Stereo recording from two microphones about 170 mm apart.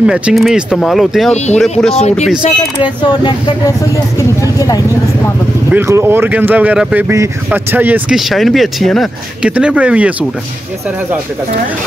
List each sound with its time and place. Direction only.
0.0 s speech: 5° right (ahead or behind)
2.0 s speech: 40° left (ahead or behind)
2.8 s speech: 25° left (ahead or behind)
5.7 s speech: 15° right (ahead or behind)